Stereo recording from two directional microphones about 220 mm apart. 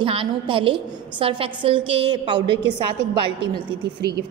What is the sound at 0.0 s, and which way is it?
A woman's voice, 25° right (ahead or behind).